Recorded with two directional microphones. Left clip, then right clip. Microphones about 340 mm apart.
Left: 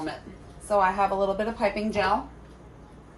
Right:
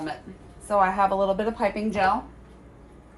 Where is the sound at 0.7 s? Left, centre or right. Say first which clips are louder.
Right 2 dB; right.